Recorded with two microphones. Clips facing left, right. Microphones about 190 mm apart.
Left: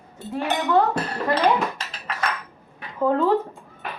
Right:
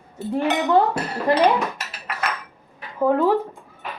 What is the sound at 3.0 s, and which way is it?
Speech, 10° right (ahead or behind).